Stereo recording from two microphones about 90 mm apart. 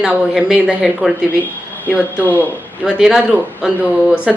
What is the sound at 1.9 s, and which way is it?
Speech, 20° left (ahead or behind).